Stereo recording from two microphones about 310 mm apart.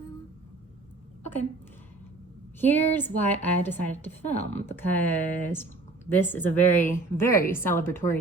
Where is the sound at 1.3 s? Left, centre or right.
Centre.